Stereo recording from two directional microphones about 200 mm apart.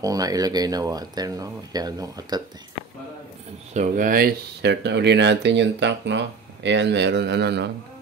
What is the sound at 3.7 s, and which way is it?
Speech, 40° right (ahead or behind).